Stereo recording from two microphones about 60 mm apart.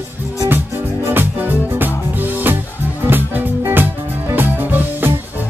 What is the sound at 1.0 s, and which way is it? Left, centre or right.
Music, right.